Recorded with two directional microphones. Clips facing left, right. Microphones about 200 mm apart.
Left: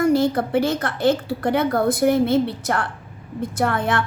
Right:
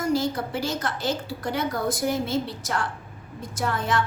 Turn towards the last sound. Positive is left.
turn(degrees=60)  # may be behind; listen again after turning